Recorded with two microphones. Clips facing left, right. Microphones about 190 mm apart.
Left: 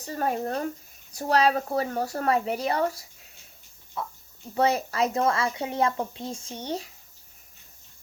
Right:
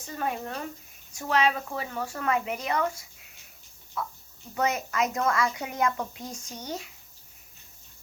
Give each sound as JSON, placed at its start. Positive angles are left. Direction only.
{"t": 0.0, "sound": "speech", "side_deg": 40}